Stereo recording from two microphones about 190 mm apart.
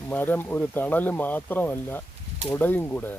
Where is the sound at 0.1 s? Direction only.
10° left (ahead or behind).